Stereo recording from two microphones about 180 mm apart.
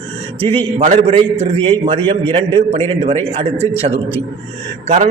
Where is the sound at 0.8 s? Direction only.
35° right (ahead or behind).